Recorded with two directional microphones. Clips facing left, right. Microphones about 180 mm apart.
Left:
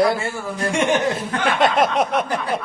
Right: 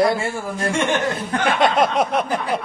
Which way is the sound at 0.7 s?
20° left (ahead or behind).